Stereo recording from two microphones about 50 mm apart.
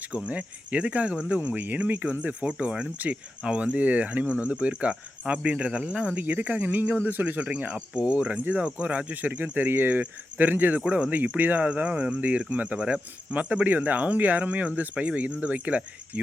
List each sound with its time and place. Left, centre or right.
0.3 s speech: right
6.2 s speech: right
7.1 s speech: right
7.3 s speech: right
10.8 s speech: right
11.3 s speech: right